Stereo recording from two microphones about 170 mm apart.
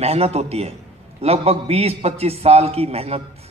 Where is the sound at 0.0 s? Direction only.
35° right (ahead or behind).